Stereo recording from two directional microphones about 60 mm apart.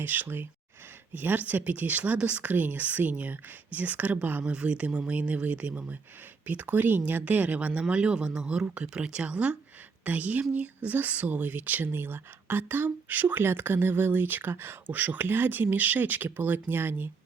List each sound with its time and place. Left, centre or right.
0.0 s speech: right
14.8 s speech: right